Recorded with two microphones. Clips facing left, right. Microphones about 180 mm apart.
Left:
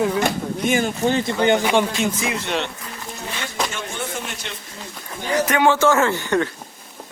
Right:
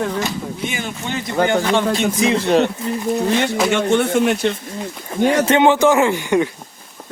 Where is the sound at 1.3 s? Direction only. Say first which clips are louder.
Right 5 dB; 20° left (ahead or behind).